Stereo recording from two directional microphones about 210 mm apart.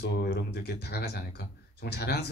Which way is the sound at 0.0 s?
55° left (ahead or behind).